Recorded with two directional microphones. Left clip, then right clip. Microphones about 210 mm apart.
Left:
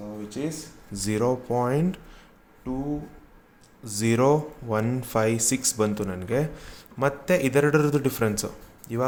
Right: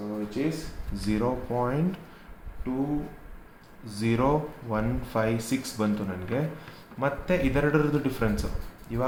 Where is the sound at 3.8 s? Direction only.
60° left (ahead or behind).